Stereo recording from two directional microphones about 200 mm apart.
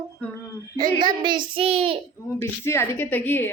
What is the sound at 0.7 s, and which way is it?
A child's voice, 20° right (ahead or behind).